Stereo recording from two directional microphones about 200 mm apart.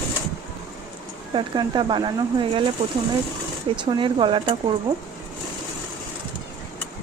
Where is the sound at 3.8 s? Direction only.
25° right (ahead or behind).